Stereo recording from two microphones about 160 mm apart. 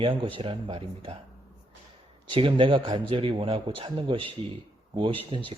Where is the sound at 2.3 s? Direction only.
30° right (ahead or behind).